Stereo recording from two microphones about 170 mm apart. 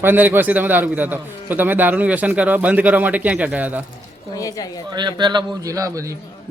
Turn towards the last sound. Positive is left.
turn(degrees=-20)  # may be behind; listen again after turning